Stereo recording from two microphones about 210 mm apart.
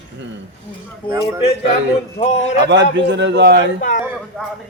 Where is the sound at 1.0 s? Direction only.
25° left (ahead or behind).